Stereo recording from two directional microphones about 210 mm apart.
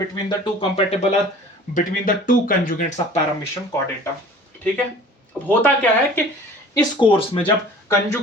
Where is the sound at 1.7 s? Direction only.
40° left (ahead or behind).